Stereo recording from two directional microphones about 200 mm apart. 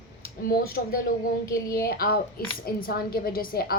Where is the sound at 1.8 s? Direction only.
45° left (ahead or behind).